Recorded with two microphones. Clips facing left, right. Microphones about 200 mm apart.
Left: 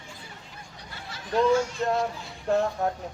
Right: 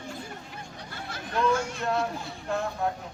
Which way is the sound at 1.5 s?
55° right (ahead or behind).